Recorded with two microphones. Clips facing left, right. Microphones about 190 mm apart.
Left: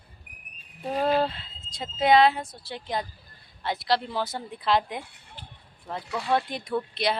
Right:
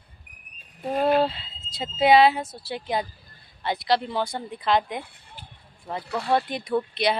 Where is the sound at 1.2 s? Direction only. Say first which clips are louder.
Right 3 dB; 5° right (ahead or behind).